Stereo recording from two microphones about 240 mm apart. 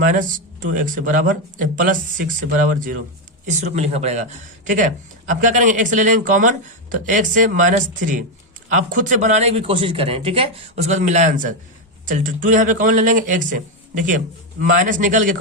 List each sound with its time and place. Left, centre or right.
0.0 s speech: right
14.6 s speech: right